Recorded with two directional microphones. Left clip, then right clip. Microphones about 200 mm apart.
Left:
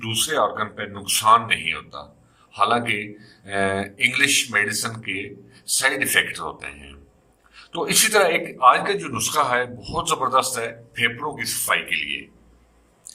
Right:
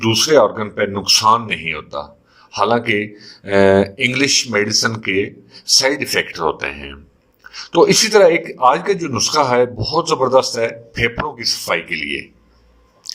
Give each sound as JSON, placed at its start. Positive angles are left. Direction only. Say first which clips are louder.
{"t": 0.0, "sound": "a man's voice", "louder": "right 9 dB", "side_deg": -25}